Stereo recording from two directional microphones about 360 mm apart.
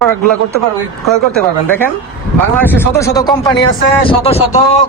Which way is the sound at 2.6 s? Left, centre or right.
Centre.